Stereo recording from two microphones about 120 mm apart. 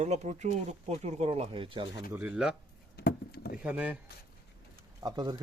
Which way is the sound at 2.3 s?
5° right (ahead or behind).